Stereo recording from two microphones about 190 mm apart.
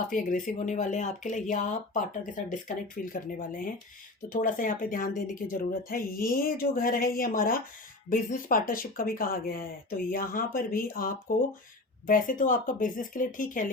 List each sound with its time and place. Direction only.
0.1 s speech: 45° left (ahead or behind)